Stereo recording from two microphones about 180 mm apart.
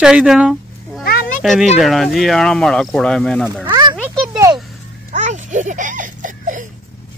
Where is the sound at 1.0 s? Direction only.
55° left (ahead or behind).